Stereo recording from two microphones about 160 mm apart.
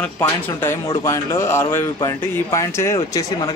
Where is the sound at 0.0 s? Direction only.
15° left (ahead or behind).